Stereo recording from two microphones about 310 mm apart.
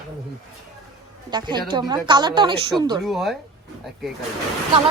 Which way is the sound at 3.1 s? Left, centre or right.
Centre.